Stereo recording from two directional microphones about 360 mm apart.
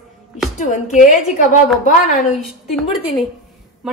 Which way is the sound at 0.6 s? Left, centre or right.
Centre.